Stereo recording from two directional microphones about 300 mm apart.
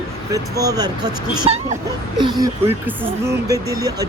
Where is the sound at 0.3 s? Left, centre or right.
Centre.